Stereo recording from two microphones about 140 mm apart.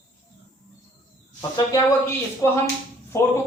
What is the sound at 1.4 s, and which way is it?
A man's voice, 30° left (ahead or behind).